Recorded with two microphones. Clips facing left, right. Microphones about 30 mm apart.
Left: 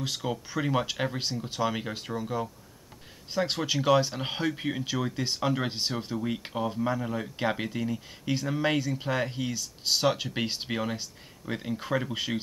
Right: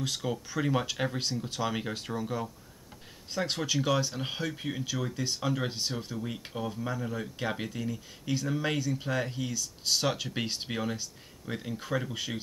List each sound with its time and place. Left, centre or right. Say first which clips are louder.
0.0 s speech: left 1 dB; centre
3.3 s speech: left 3 dB; centre